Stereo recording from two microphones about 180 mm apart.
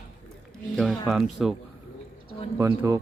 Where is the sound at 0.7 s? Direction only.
Centre (ahead or behind).